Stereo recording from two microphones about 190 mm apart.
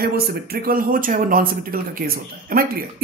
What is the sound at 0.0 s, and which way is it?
Speech, 50° right (ahead or behind).